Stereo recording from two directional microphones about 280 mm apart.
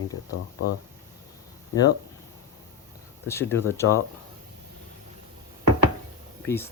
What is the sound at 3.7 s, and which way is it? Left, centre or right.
Speech, centre.